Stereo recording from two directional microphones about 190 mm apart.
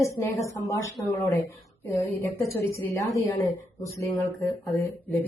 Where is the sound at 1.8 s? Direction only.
10° left (ahead or behind).